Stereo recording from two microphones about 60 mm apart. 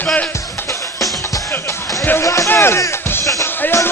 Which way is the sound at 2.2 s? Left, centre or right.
Left.